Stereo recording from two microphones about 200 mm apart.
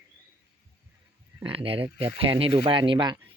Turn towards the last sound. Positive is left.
turn(degrees=-25)  # may be behind; listen again after turning